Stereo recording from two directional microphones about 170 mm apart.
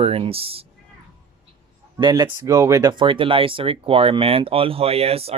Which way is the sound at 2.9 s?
30° right (ahead or behind).